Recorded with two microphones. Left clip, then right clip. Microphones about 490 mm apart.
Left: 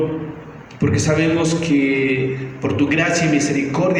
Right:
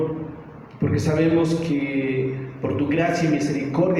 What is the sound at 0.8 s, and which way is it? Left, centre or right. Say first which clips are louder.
Speech: left 4 dB; centre.